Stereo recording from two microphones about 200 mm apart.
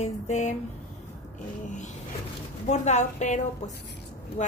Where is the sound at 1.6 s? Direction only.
40° left (ahead or behind).